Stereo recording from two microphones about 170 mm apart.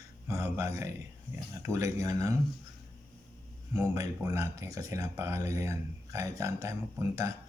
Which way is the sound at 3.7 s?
20° right (ahead or behind).